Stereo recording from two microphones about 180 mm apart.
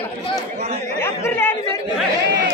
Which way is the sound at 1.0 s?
15° left (ahead or behind).